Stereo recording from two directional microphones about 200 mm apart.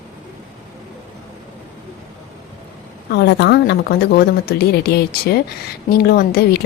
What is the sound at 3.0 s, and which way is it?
A woman's voice, 55° left (ahead or behind).